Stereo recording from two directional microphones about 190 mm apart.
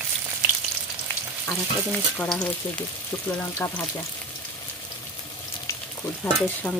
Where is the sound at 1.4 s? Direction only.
5° left (ahead or behind).